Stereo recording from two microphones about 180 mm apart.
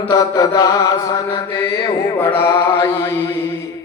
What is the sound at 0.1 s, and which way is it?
Mantra, 20° left (ahead or behind).